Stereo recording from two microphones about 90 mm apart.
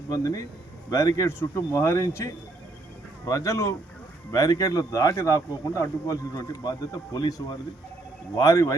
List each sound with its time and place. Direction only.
0.1 s speech: 40° left (ahead or behind)